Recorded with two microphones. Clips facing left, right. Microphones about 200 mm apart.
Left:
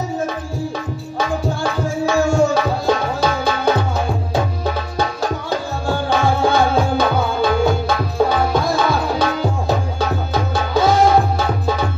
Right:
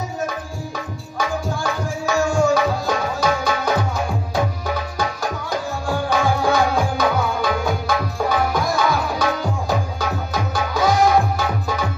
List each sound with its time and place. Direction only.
1.1 s tabla: 30° left (ahead or behind)
4.6 s music: 30° left (ahead or behind)